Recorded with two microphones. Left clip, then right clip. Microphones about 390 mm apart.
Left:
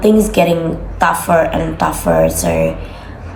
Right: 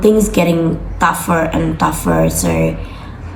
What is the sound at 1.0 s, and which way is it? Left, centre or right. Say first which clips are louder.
Speech: left 2 dB; centre.